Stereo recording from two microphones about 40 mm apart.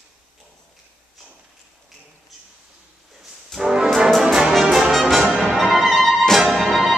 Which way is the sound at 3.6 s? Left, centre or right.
Centre.